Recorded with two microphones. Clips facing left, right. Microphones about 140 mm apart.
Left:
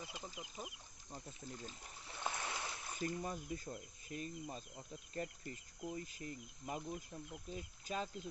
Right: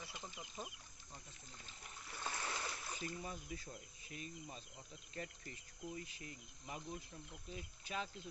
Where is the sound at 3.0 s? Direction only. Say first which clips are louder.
Left 7 dB; 45° left (ahead or behind).